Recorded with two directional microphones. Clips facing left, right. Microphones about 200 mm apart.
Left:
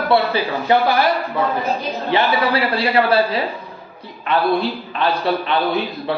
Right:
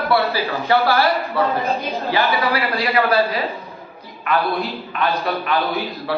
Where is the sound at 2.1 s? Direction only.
25° left (ahead or behind).